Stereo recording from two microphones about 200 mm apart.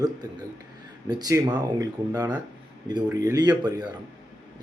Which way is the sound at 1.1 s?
20° right (ahead or behind).